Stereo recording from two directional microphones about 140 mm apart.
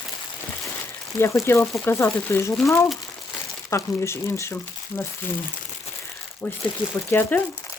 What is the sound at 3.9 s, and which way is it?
Speech, 20° left (ahead or behind).